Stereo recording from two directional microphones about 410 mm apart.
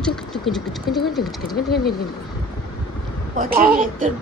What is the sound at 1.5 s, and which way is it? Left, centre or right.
Speech, left.